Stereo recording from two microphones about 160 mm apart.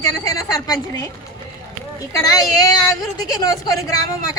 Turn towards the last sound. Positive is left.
turn(degrees=20)  # may be behind; listen again after turning